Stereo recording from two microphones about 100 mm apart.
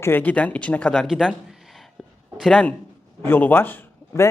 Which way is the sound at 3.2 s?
20° left (ahead or behind).